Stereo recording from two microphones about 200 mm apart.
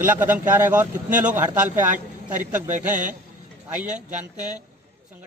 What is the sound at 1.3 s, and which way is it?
Speech, 10° right (ahead or behind).